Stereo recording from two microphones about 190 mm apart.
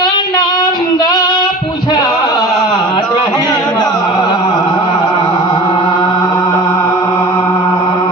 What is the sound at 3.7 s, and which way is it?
Music, 20° left (ahead or behind).